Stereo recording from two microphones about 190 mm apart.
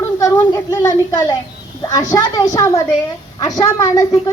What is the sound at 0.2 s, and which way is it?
A woman's voice, 15° left (ahead or behind).